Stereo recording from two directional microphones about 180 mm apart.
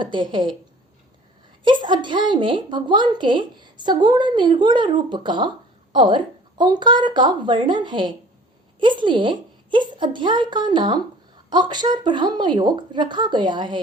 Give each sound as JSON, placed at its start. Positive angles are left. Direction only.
{"t": 0.0, "sound": "a woman's voice", "side_deg": -25}
{"t": 1.6, "sound": "a woman's voice", "side_deg": -25}